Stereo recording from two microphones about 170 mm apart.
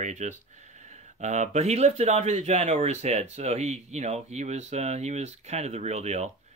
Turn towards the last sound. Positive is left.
turn(degrees=-40)  # may be behind; listen again after turning